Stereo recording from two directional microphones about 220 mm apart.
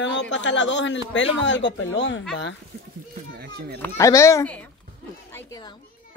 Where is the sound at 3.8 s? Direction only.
15° left (ahead or behind).